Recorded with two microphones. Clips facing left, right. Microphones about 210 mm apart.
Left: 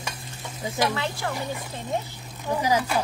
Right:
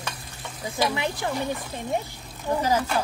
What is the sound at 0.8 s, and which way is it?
Speech, 15° right (ahead or behind).